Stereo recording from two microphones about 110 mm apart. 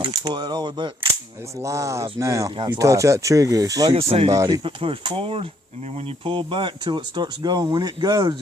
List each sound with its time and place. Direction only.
0.1 s speech: 40° right (ahead or behind)
1.5 s speech: 25° right (ahead or behind)
3.9 s speech: 55° right (ahead or behind)
4.3 s speech: 30° right (ahead or behind)
4.6 s speech: 55° right (ahead or behind)